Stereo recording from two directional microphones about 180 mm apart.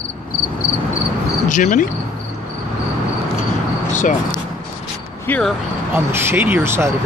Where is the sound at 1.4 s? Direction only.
45° left (ahead or behind).